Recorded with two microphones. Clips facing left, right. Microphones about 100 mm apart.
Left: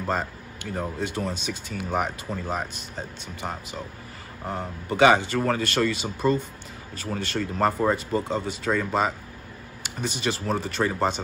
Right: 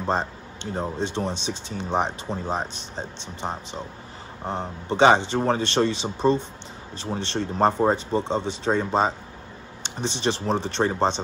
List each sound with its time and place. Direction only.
0.0 s a man's voice: 30° right (ahead or behind)